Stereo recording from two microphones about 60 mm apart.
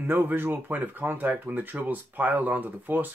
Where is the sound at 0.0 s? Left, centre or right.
Right.